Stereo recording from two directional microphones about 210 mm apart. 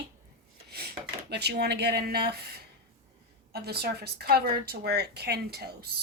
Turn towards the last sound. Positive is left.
turn(degrees=-50)  # may be behind; listen again after turning